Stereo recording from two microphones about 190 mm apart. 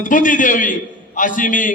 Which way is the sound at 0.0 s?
45° left (ahead or behind).